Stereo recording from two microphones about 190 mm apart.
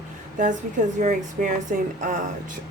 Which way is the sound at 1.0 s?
45° right (ahead or behind).